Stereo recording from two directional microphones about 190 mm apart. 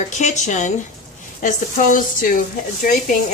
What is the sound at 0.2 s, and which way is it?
A woman's voice, 40° left (ahead or behind).